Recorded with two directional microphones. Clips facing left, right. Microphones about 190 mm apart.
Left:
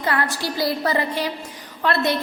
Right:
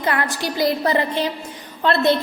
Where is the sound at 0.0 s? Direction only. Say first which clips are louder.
Right 1 dB; 20° right (ahead or behind).